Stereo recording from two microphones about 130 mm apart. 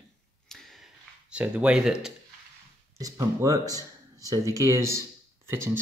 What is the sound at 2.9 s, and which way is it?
Speech, 25° right (ahead or behind).